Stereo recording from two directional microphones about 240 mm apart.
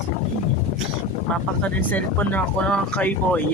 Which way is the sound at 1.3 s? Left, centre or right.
Centre.